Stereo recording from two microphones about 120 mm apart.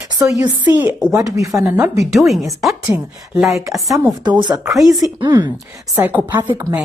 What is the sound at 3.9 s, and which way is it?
Speech, 35° right (ahead or behind).